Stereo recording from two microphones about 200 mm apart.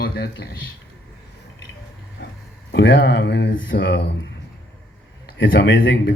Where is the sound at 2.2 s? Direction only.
60° left (ahead or behind).